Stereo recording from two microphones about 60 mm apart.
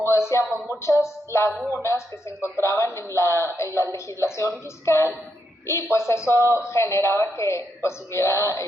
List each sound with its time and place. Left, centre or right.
0.0 s a woman's voice: left